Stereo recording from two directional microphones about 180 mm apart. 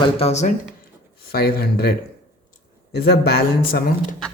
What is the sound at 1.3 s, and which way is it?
Speech, 60° left (ahead or behind).